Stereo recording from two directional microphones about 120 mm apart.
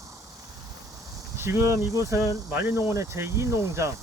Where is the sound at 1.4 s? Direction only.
25° right (ahead or behind).